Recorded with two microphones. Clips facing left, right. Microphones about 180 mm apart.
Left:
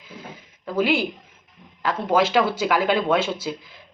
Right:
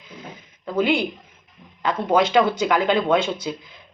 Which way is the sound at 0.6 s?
5° left (ahead or behind).